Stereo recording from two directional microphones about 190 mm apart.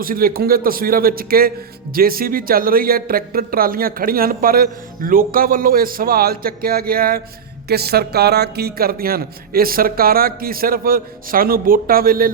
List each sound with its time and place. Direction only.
0.0 s a man's voice: 50° right (ahead or behind)